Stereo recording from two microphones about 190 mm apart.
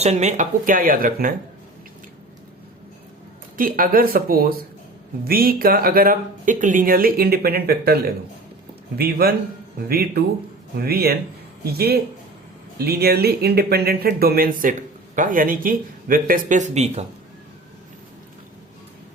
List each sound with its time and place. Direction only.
0.0 s speech: 35° right (ahead or behind)
3.6 s speech: 50° right (ahead or behind)
9.0 s speech: 55° right (ahead or behind); by 17.1 s 35° right (ahead or behind)